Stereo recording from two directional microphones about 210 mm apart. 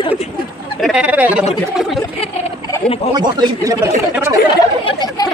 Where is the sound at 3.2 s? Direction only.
20° right (ahead or behind).